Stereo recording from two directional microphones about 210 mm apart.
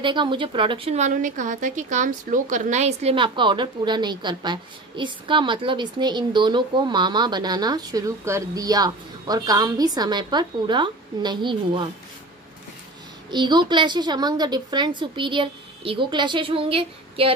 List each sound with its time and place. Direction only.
0.0 s speech: 25° right (ahead or behind)
13.3 s speech: 20° right (ahead or behind)